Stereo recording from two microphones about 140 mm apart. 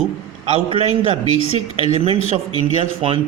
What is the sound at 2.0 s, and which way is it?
Speech, 45° right (ahead or behind).